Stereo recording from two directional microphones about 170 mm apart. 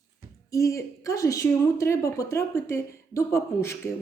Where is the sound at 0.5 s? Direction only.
20° left (ahead or behind).